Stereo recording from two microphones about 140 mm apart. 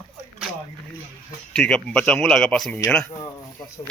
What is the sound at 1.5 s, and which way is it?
A man's voice, 5° left (ahead or behind).